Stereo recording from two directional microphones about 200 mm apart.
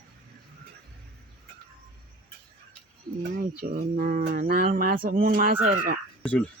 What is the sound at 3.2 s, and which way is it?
Speech, 45° right (ahead or behind).